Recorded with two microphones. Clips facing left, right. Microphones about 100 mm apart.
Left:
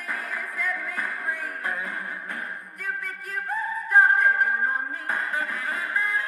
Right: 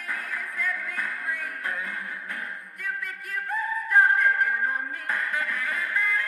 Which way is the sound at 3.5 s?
15° left (ahead or behind).